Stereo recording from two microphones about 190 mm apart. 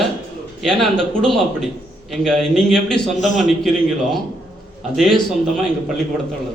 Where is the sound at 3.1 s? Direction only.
40° left (ahead or behind).